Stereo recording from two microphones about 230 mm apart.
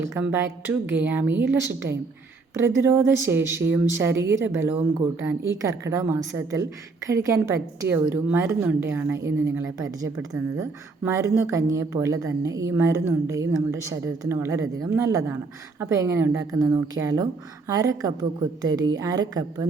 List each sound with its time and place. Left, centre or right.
0.0 s a woman's voice: centre